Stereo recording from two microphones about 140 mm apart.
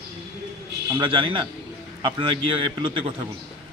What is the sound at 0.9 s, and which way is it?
A man's voice, 35° right (ahead or behind).